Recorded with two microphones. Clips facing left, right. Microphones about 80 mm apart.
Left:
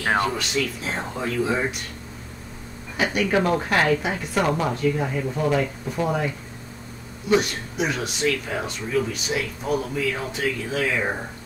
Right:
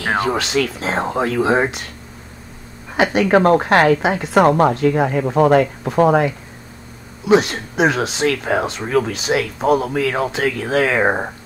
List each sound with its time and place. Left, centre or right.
0.0 s speech: centre
0.3 s speech: right
3.0 s speech: right
3.3 s a woman's voice: right
4.0 s a woman's voice: right
4.4 s a woman's voice: right
4.7 s speech: right
7.2 s speech: right